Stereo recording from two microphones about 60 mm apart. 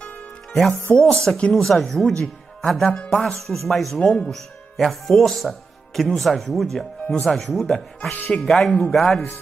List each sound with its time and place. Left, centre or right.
0.0 s music: left
0.9 s speech: centre
4.0 s speech: centre
4.3 s speech: centre